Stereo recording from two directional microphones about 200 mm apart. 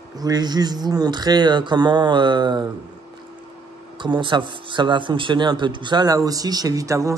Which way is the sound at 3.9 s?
25° right (ahead or behind).